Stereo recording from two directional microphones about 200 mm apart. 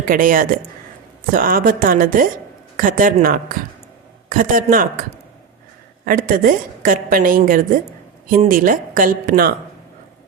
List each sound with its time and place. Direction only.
0.1 s a woman's voice: 45° right (ahead or behind)
6.1 s a woman's voice: 45° right (ahead or behind)